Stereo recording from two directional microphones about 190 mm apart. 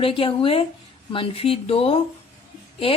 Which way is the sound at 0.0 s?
30° left (ahead or behind).